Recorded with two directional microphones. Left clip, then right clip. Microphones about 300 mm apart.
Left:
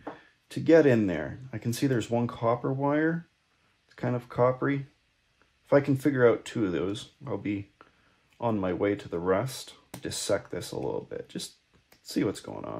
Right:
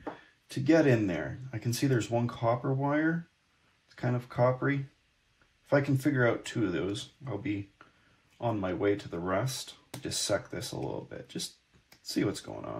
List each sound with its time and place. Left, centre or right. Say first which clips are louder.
0.7 s speech: left 4 dB; left